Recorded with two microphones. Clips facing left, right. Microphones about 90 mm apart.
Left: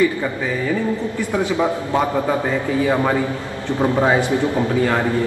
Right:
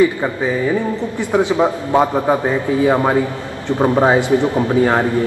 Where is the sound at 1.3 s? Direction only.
20° right (ahead or behind).